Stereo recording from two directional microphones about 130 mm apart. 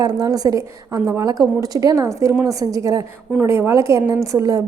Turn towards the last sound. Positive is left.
turn(degrees=-25)  # may be behind; listen again after turning